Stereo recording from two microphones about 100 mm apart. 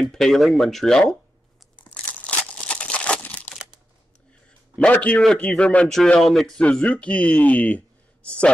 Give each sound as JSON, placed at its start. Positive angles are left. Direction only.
{"t": 0.0, "sound": "speech", "side_deg": 5}
{"t": 2.1, "sound": "crumpling", "side_deg": 10}
{"t": 4.7, "sound": "a man's voice", "side_deg": 10}
{"t": 5.2, "sound": "speech", "side_deg": 5}